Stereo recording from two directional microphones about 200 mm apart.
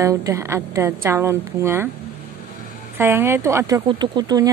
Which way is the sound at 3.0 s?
10° right (ahead or behind).